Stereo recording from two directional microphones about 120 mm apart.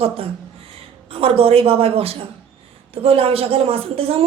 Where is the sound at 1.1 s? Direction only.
50° right (ahead or behind).